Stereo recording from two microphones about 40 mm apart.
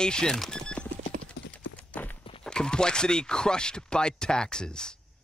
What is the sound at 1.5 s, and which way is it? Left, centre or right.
Clip-clop, left.